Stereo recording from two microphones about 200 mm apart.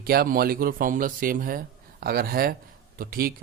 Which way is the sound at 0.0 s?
50° right (ahead or behind).